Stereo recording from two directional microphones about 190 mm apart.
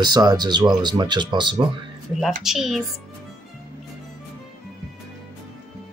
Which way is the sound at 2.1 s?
Centre (ahead or behind).